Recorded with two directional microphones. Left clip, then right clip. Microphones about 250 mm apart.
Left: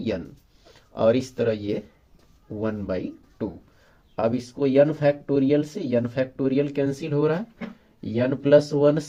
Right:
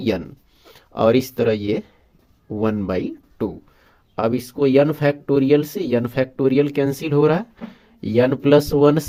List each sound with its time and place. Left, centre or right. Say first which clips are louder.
0.6 s speech: right 3 dB; right